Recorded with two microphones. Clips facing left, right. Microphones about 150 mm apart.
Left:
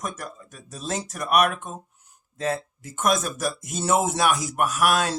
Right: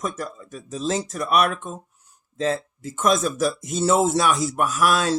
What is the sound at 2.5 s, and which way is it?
A man's voice, 15° left (ahead or behind).